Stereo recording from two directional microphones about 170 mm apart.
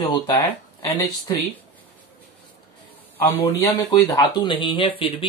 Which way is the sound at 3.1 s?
10° left (ahead or behind).